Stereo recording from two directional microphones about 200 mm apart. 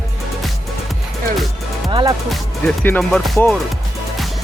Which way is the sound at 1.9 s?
20° right (ahead or behind).